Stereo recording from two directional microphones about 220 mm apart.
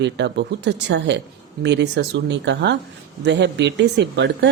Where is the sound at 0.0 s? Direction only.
50° right (ahead or behind).